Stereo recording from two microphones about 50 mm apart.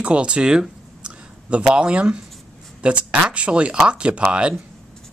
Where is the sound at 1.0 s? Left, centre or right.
Right.